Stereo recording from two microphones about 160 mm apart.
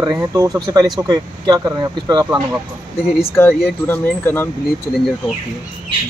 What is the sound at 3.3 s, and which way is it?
A man's voice, 15° left (ahead or behind).